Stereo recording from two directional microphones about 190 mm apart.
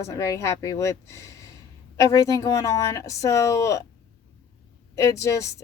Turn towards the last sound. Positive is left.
turn(degrees=15)  # may be behind; listen again after turning